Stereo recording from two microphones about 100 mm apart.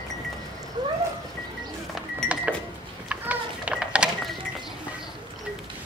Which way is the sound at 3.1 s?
10° right (ahead or behind).